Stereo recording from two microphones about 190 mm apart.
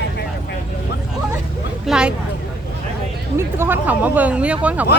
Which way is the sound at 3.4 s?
10° right (ahead or behind).